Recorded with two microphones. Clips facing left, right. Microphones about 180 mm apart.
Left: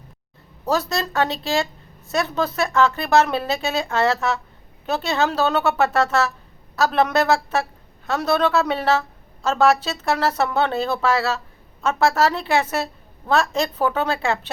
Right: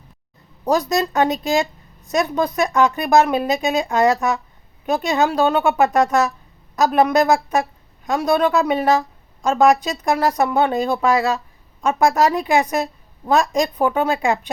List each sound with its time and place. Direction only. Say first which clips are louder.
0.6 s a woman's voice: right 4 dB; 15° right (ahead or behind)